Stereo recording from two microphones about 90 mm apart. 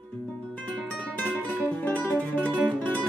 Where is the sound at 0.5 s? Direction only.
15° left (ahead or behind).